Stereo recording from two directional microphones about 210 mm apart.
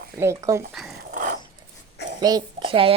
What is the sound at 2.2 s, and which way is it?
Speech, 20° right (ahead or behind).